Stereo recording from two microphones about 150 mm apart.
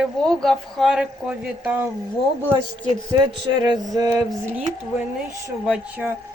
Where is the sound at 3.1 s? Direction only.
30° right (ahead or behind).